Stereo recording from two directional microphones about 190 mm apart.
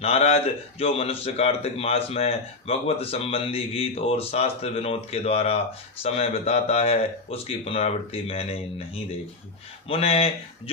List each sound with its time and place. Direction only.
0.0 s speech: 30° left (ahead or behind)
9.9 s speech: 30° left (ahead or behind)